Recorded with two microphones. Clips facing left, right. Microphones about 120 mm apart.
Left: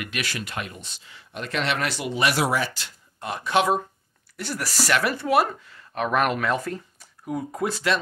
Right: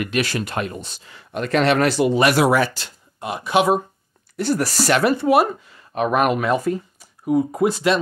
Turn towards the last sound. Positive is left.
turn(degrees=-20)  # may be behind; listen again after turning